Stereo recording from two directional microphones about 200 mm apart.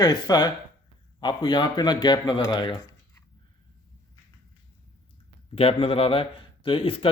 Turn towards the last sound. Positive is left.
turn(degrees=25)  # may be behind; listen again after turning